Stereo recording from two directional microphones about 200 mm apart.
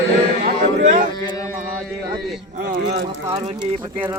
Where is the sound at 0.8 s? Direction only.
40° right (ahead or behind).